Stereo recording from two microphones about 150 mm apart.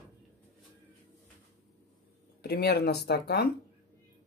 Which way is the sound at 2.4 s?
90° left.